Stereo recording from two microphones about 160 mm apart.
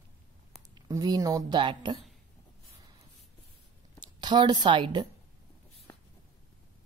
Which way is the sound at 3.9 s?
30° right (ahead or behind).